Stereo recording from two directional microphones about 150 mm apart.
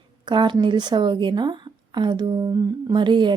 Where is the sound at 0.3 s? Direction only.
30° right (ahead or behind).